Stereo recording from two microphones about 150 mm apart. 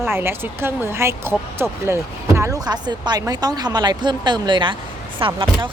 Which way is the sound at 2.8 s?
30° right (ahead or behind).